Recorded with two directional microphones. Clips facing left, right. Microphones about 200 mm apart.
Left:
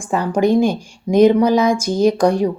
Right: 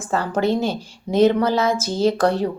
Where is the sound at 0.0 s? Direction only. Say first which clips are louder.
Left 4 dB; 15° left (ahead or behind).